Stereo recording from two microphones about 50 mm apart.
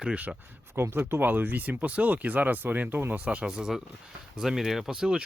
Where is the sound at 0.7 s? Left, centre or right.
Right.